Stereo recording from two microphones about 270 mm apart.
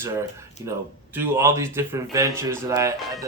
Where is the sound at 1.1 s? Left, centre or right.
Centre.